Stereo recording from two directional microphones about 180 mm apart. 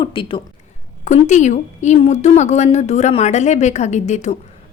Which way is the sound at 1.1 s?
40° left (ahead or behind).